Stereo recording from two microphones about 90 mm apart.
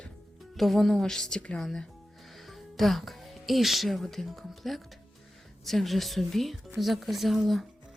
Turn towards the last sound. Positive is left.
turn(degrees=0)  # may be behind; listen again after turning